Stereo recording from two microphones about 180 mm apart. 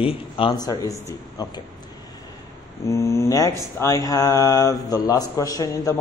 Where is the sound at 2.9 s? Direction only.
15° left (ahead or behind).